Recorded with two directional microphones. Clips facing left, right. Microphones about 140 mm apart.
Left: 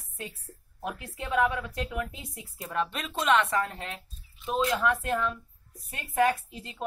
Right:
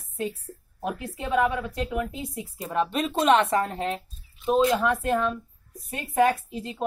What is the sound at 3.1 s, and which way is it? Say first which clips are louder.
Speech: right 4 dB; 35° right (ahead or behind).